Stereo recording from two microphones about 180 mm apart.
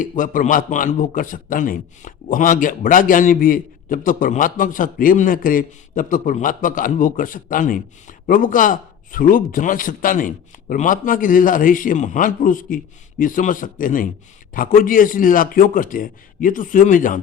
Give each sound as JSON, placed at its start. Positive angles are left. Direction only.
{"t": 0.0, "sound": "a man's voice", "side_deg": 50}